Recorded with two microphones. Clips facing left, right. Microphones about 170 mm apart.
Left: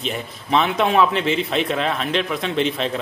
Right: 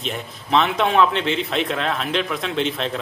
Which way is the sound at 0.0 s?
Centre (ahead or behind).